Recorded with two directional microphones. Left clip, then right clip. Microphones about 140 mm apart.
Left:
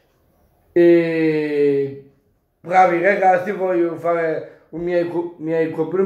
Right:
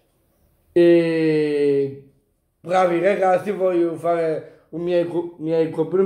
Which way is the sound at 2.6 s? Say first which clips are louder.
Left 4 dB; 30° right (ahead or behind).